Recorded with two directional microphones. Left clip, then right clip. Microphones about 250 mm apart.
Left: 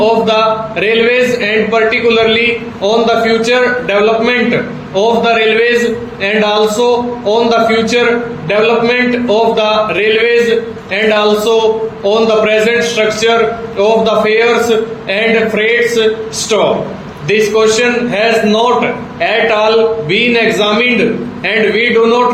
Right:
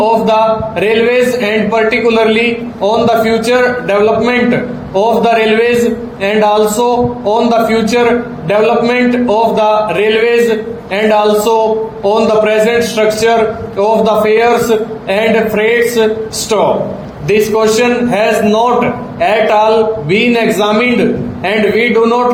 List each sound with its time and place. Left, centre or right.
0.0 s a man's voice: right
17.2 s a man's voice: right